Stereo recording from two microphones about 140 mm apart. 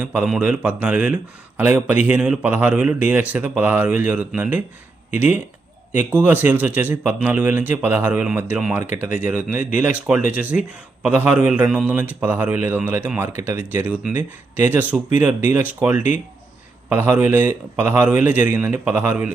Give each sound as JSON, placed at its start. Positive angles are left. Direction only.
{"t": 0.0, "sound": "a man's voice", "side_deg": -10}